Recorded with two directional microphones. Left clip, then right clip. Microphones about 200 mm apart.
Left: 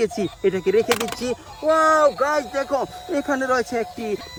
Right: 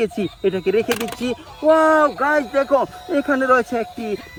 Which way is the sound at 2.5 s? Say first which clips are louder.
Right 6 dB; 30° right (ahead or behind).